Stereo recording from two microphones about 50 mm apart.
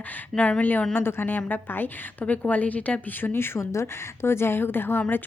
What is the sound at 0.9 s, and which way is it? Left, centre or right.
Speech, left.